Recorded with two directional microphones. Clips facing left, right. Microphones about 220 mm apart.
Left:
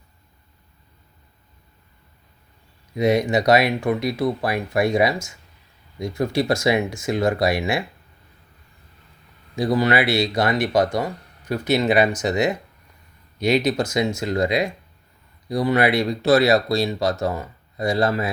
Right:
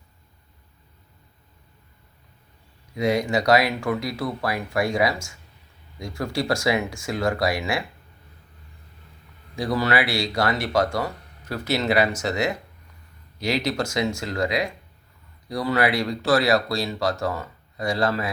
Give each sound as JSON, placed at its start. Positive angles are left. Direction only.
{"t": 2.9, "sound": "speech", "side_deg": 20}
{"t": 9.6, "sound": "speech", "side_deg": 20}